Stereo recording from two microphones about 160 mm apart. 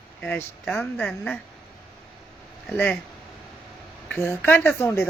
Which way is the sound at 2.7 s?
10° left (ahead or behind).